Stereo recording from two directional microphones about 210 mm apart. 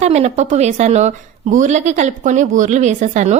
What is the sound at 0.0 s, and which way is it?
A woman's voice, 30° right (ahead or behind).